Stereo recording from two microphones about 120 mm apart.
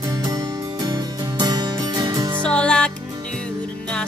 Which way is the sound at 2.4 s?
5° left (ahead or behind).